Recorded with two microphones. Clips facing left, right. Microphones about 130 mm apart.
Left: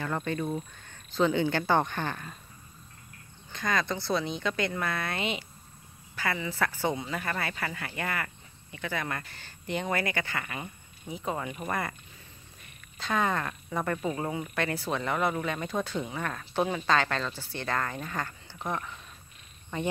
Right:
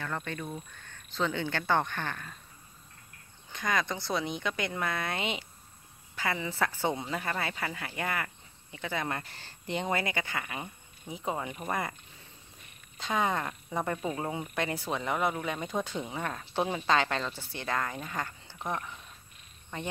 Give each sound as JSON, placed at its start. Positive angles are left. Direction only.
{"t": 0.0, "sound": "speech", "side_deg": 15}
{"t": 3.5, "sound": "speech", "side_deg": -15}
{"t": 12.9, "sound": "speech", "side_deg": -20}
{"t": 19.7, "sound": "speech", "side_deg": 0}